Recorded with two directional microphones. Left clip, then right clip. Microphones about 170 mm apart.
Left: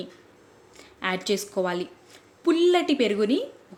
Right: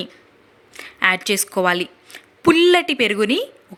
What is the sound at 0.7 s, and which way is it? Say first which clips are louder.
A woman's voice: right 11 dB; 15° right (ahead or behind).